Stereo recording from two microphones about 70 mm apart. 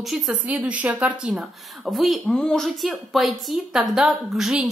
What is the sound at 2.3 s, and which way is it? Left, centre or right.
Speech, centre.